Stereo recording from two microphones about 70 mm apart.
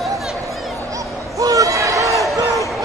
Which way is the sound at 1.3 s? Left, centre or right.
Right.